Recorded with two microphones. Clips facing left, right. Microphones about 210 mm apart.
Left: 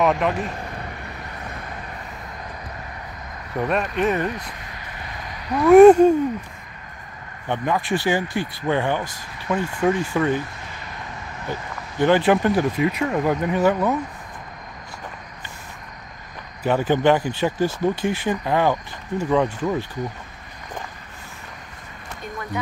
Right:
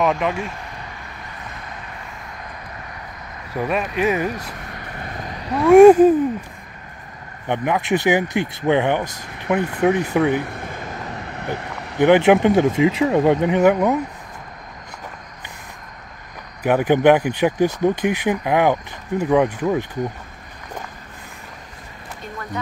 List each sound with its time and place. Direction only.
0.0 s speech: centre (ahead or behind)
3.5 s speech: 5° right (ahead or behind)
5.0 s a sound: 40° right (ahead or behind)
5.7 s speech: centre (ahead or behind)
7.4 s speech: 15° right (ahead or behind)
10.4 s a sound: 55° right (ahead or behind)
12.0 s speech: 20° right (ahead or behind)
16.6 s speech: 15° right (ahead or behind)